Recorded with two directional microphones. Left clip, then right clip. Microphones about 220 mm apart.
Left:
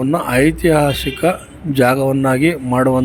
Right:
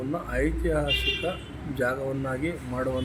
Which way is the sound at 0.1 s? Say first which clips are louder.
Left 14 dB; 40° left (ahead or behind).